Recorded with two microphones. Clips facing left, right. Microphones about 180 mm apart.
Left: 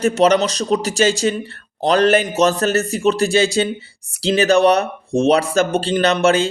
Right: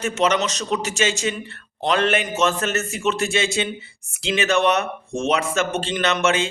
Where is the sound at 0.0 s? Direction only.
35° left (ahead or behind).